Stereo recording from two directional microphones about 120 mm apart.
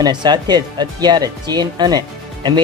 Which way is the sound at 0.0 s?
35° right (ahead or behind).